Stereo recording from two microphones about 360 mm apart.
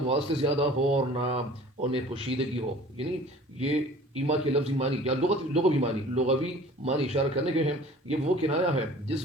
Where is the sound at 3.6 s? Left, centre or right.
Centre.